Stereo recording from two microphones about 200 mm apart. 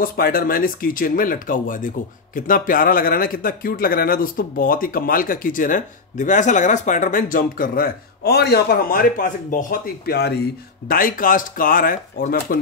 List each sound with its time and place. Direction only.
0.0 s speech: 45° left (ahead or behind)